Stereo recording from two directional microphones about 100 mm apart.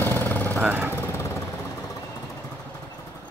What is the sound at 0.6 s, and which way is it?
Vehicle, 20° right (ahead or behind).